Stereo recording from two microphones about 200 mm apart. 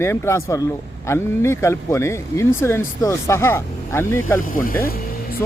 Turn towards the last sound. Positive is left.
turn(degrees=45)  # may be behind; listen again after turning